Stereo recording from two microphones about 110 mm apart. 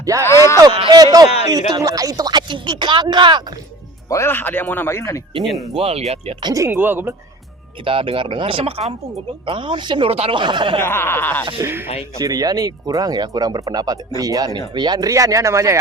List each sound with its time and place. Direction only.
0.0 s speech: 30° right (ahead or behind)
0.3 s speech: 25° left (ahead or behind)
0.9 s speech: 35° right (ahead or behind)
4.1 s speech: 20° left (ahead or behind)
5.7 s speech: 70° right (ahead or behind)
6.4 s speech: 30° right (ahead or behind)
6.7 s speech: 15° right (ahead or behind)
7.9 s speech: 55° right (ahead or behind)
10.1 s speech: 65° right (ahead or behind)
10.3 s speech: 45° right (ahead or behind)
10.8 s speech: 20° left (ahead or behind)
11.6 s speech: 20° right (ahead or behind)
12.2 s speech: 35° right (ahead or behind)